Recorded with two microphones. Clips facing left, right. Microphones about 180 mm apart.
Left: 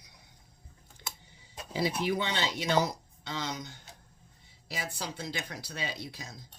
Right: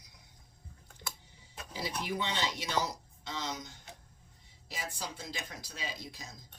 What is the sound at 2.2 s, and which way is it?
Speech, 65° left (ahead or behind).